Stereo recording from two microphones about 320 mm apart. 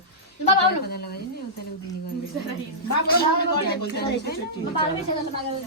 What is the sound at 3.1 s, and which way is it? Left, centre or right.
A woman's voice, left.